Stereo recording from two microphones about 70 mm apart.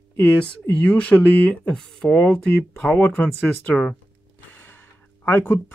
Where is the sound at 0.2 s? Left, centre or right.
Centre.